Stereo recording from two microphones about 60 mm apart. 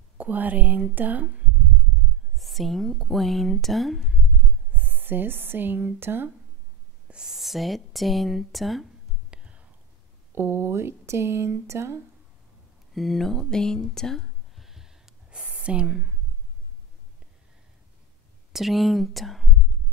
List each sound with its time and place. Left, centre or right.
0.2 s speech: right
2.3 s speech: centre
4.7 s speech: right
7.1 s speech: centre
9.3 s whispering: centre
10.3 s speech: right
12.9 s speech: centre
14.6 s a sound: centre
18.5 s speech: centre